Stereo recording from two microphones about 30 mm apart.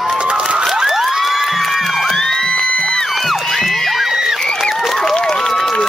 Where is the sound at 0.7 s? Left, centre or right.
Centre.